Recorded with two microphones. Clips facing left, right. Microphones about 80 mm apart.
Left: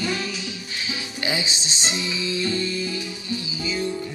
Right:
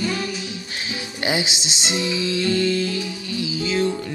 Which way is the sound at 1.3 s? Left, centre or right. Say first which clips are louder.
Right 4 dB; right.